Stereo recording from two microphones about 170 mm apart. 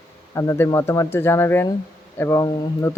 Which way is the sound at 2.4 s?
25° left (ahead or behind).